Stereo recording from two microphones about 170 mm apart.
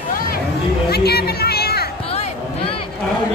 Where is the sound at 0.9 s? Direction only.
65° left (ahead or behind).